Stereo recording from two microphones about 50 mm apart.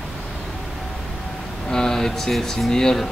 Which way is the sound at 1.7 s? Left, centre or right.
Centre.